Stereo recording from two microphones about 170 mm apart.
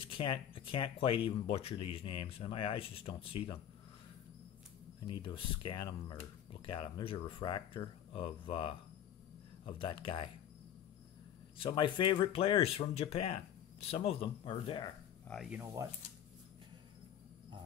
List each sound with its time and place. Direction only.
0.0 s speech: 30° left (ahead or behind)
5.0 s speech: 25° left (ahead or behind)
11.5 s speech: 30° left (ahead or behind)
15.2 s speech: centre (ahead or behind)
15.6 s speech: 20° right (ahead or behind)